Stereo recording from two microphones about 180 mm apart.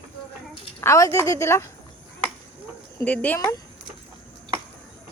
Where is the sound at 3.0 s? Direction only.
10° left (ahead or behind).